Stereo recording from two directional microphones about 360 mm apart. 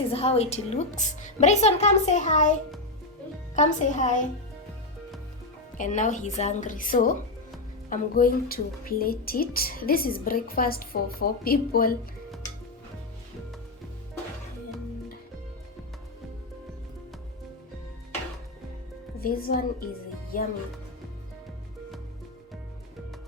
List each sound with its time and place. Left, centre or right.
0.1 s a woman's voice: centre
5.7 s a woman's voice: left
19.2 s a woman's voice: left